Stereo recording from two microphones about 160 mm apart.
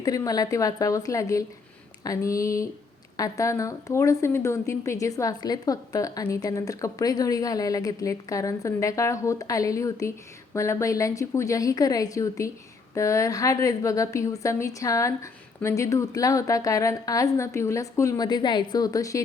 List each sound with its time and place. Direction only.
0.0 s speech: 25° left (ahead or behind)